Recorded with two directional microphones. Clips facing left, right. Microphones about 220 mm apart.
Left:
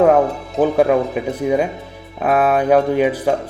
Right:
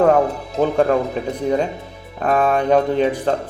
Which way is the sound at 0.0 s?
5° left (ahead or behind).